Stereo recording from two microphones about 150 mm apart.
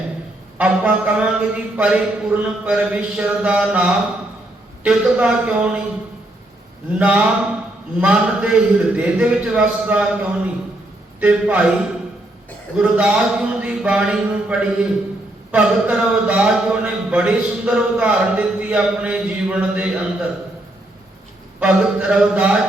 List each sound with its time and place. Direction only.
0.6 s speech: 10° right (ahead or behind)
7.0 s speech: 10° right (ahead or behind)
21.6 s speech: 10° right (ahead or behind)